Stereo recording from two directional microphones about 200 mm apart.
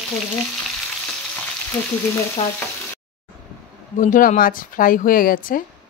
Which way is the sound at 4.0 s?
40° left (ahead or behind).